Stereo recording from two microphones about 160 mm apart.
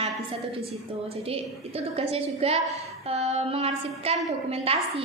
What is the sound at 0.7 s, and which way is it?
A woman's voice, 40° right (ahead or behind).